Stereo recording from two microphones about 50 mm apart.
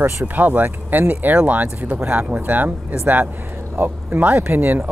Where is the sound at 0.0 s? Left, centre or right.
Right.